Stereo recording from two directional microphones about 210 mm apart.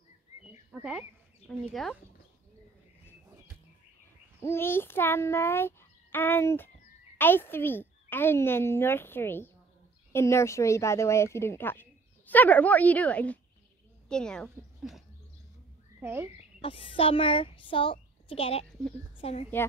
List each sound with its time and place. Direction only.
0.7 s speech: 5° right (ahead or behind)
4.4 s a child's voice: 10° left (ahead or behind); by 16.3 s 10° right (ahead or behind)
16.6 s a woman's voice: 25° left (ahead or behind)